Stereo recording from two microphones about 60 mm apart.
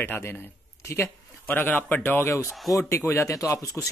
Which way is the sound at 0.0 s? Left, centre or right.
Left.